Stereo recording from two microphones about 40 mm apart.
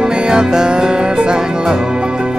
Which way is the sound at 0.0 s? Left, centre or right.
Right.